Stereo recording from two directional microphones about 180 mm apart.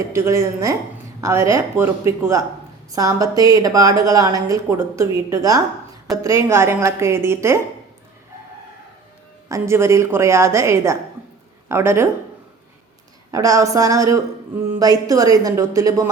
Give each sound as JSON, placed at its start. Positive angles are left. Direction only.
{"t": 0.1, "sound": "a woman's voice", "side_deg": -15}
{"t": 9.5, "sound": "a woman's voice", "side_deg": -15}
{"t": 13.3, "sound": "a woman's voice", "side_deg": -20}